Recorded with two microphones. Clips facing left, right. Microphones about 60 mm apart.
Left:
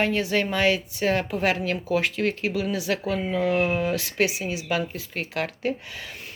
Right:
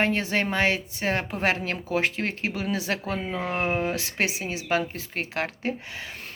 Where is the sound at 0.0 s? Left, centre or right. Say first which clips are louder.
Left 1 dB; right.